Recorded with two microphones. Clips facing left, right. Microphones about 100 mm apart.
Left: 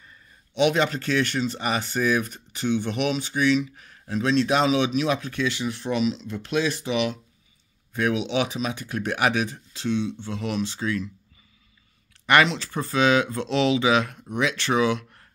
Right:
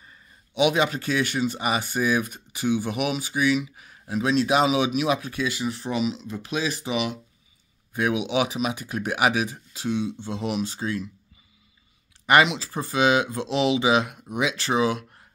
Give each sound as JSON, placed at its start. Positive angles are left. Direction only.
{"t": 0.6, "sound": "speech", "side_deg": -10}
{"t": 10.6, "sound": "speech", "side_deg": -40}
{"t": 12.3, "sound": "speech", "side_deg": -10}
{"t": 14.6, "sound": "speech", "side_deg": -35}